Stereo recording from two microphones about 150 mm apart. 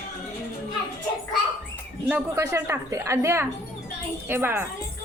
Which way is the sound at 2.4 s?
20° right (ahead or behind).